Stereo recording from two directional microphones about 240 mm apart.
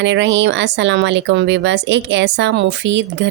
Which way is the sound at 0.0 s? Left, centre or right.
Right.